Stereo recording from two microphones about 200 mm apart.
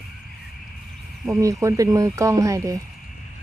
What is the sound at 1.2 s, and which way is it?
Speech, 15° right (ahead or behind).